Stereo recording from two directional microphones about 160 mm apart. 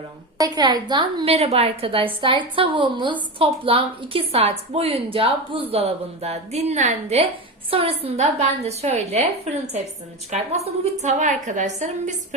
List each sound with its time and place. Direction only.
0.3 s a woman's voice: 25° right (ahead or behind); by 9.2 s 40° right (ahead or behind)
10.3 s a woman's voice: 45° right (ahead or behind)